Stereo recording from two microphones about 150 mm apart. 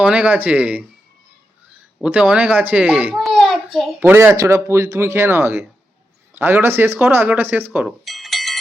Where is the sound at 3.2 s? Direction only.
Centre (ahead or behind).